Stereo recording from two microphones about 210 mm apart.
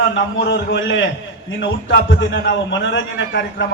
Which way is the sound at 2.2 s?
60° left (ahead or behind).